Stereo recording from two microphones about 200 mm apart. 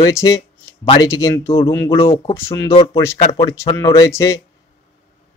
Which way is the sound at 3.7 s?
15° left (ahead or behind).